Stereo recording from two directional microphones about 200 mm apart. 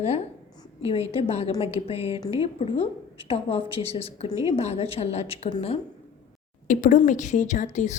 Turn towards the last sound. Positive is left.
turn(degrees=35)  # may be behind; listen again after turning